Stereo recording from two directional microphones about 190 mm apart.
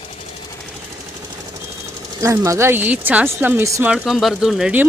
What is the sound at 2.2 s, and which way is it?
Speech, 15° right (ahead or behind).